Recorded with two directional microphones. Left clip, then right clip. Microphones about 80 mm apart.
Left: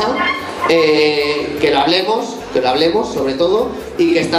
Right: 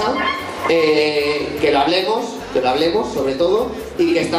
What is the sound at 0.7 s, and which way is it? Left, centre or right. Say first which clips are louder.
A man's voice: left 3 dB; left.